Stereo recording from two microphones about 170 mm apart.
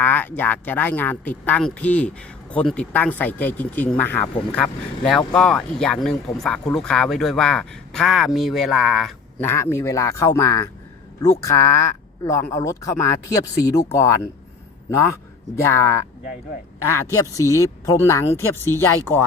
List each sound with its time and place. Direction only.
0.0 s speech: 10° left (ahead or behind)
9.4 s speech: 15° left (ahead or behind)
15.6 s speech: 15° left (ahead or behind)
16.9 s speech: 15° left (ahead or behind)